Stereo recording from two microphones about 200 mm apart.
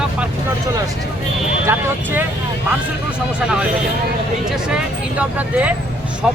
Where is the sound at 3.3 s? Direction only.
5° right (ahead or behind).